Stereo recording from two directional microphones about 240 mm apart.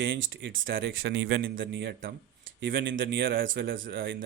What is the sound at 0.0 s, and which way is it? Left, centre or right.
Speech, right.